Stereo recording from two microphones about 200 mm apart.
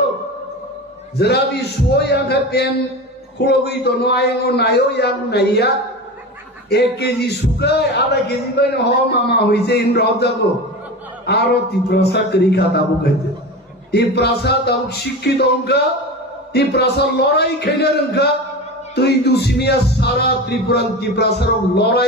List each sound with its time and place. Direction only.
1.1 s a man's voice: 55° left (ahead or behind)
6.7 s a man's voice: 55° left (ahead or behind)